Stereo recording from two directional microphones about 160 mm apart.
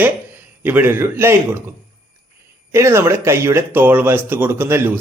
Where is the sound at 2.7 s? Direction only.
15° right (ahead or behind).